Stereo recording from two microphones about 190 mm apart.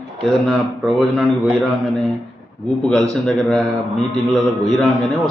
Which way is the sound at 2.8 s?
5° left (ahead or behind).